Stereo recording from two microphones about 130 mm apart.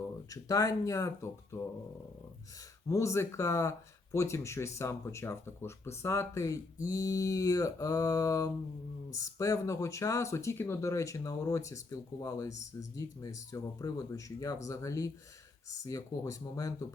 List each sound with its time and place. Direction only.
0.3 s speech: 30° left (ahead or behind)
2.9 s speech: 25° left (ahead or behind)